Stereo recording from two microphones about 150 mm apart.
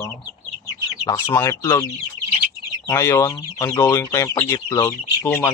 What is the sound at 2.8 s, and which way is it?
Speech, 15° left (ahead or behind).